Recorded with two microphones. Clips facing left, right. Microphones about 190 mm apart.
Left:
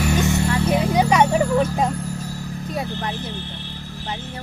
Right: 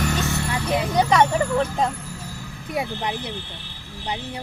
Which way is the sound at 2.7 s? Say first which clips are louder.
Right 2 dB; 15° right (ahead or behind).